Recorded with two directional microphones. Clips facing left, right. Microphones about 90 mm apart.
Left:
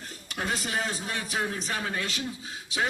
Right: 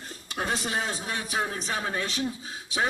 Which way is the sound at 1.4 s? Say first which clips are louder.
Right 1 dB; 20° right (ahead or behind).